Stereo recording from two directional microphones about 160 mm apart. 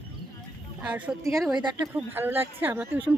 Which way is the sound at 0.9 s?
10° right (ahead or behind).